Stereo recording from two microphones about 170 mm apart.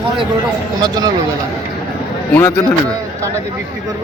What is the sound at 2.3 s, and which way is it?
Speech, 15° left (ahead or behind).